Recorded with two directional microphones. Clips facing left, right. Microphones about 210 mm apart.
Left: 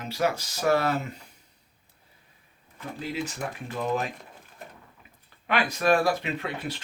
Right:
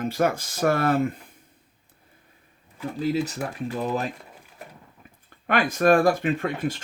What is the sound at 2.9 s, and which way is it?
Speech, 40° right (ahead or behind).